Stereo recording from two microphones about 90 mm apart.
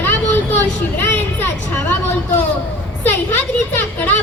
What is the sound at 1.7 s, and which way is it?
Vehicle, 15° left (ahead or behind).